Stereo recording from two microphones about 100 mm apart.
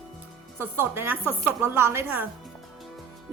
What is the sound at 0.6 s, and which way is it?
A woman's voice, 20° right (ahead or behind).